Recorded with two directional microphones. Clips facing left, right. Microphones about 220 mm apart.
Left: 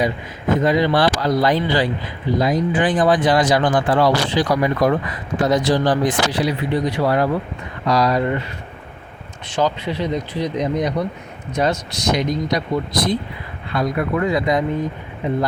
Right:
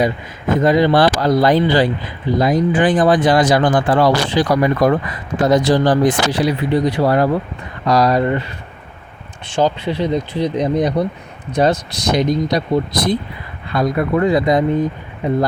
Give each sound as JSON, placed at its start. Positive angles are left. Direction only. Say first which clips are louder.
{"t": 0.6, "sound": "speech", "louder": "right 5 dB", "side_deg": -45}
{"t": 9.5, "sound": "speech", "louder": "right 3 dB", "side_deg": -30}